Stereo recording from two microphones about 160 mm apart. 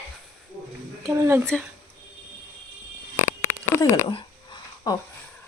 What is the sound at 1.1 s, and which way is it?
Speech, 15° right (ahead or behind).